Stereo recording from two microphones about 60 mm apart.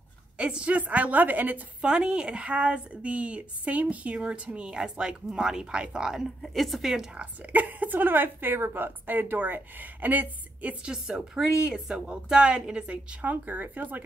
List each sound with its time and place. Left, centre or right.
0.4 s a woman's voice: centre
1.8 s a woman's voice: centre
6.4 s a woman's voice: centre
7.5 s a woman's voice: right
10.9 s a woman's voice: centre; by 14.0 s right